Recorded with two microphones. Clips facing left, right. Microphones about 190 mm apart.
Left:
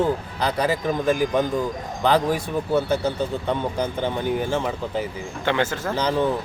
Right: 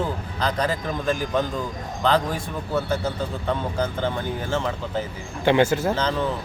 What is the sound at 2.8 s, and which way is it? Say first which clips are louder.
Speech: left 1 dB; 20° left (ahead or behind).